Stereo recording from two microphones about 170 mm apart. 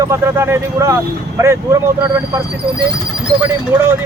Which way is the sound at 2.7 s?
65° right (ahead or behind).